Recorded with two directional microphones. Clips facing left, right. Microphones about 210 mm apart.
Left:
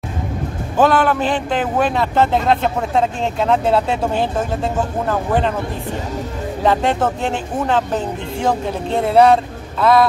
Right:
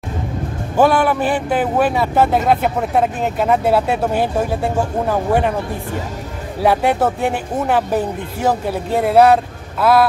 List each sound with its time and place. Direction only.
0.7 s speech: 10° right (ahead or behind)
6.6 s speech: 10° right (ahead or behind)